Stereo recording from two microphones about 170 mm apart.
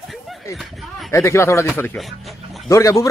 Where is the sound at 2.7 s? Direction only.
20° left (ahead or behind).